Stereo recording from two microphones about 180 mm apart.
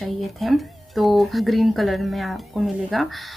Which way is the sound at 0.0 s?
Centre (ahead or behind).